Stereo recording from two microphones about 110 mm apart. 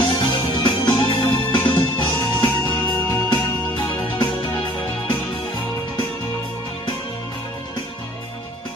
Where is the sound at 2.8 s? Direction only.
15° left (ahead or behind).